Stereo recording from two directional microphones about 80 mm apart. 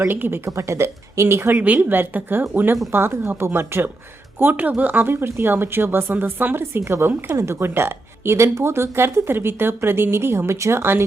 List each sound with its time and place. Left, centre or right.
0.0 s a woman's voice: right
1.5 s a woman's voice: centre